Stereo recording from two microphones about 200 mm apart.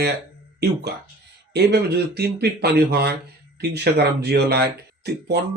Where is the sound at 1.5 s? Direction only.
55° right (ahead or behind).